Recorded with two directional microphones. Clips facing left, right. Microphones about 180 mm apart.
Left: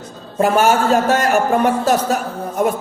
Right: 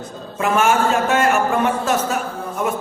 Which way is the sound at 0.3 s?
35° left (ahead or behind).